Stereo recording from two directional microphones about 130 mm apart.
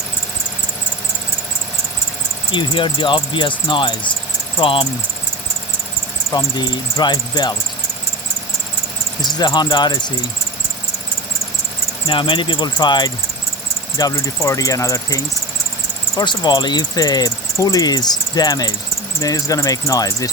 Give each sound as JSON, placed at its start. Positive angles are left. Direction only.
{"t": 2.5, "sound": "cricket", "side_deg": 40}
{"t": 6.3, "sound": "cricket", "side_deg": 30}
{"t": 9.2, "sound": "cricket", "side_deg": 35}
{"t": 12.0, "sound": "cricket", "side_deg": 40}
{"t": 14.0, "sound": "speech", "side_deg": 25}
{"t": 16.1, "sound": "cricket", "side_deg": 35}
{"t": 19.2, "sound": "speech", "side_deg": 25}